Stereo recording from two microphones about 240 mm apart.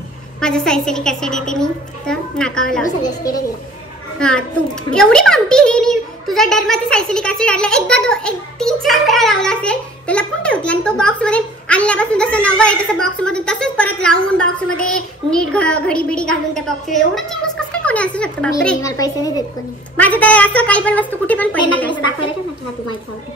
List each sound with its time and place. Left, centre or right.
0.4 s a child's voice: centre
3.0 s a woman's voice: centre
4.2 s a child's voice: centre
18.9 s a woman's voice: centre